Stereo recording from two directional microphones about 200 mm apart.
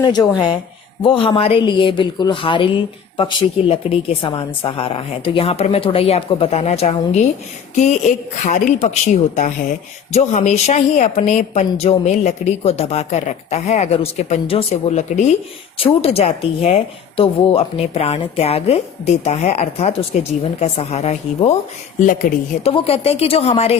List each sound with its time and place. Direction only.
0.0 s a woman's voice: 20° left (ahead or behind)
22.6 s speech: 30° left (ahead or behind)